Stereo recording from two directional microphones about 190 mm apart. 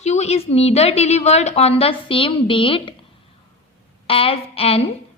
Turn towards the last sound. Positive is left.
turn(degrees=30)  # may be behind; listen again after turning